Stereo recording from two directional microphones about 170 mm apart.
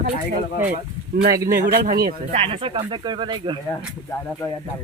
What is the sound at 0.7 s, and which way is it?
Speech, 60° right (ahead or behind).